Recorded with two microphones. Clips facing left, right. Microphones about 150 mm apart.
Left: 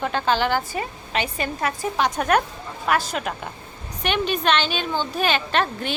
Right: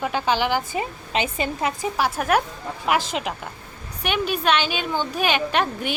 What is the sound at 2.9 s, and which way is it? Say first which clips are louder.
Speech: even; 20° right (ahead or behind).